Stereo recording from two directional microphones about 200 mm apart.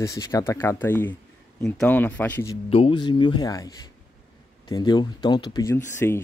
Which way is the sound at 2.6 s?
30° left (ahead or behind).